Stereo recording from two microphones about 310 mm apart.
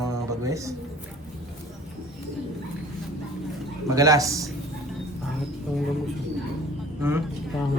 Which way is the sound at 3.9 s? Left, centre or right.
Centre.